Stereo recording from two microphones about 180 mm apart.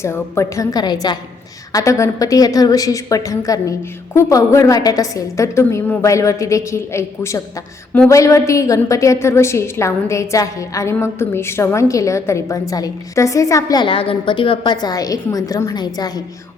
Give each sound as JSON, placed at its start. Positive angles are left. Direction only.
{"t": 0.0, "sound": "a woman's voice", "side_deg": 15}